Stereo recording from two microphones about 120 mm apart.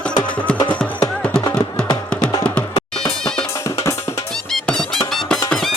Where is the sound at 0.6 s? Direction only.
35° left (ahead or behind).